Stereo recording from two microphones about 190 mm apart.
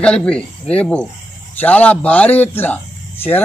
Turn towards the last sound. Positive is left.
turn(degrees=10)  # may be behind; listen again after turning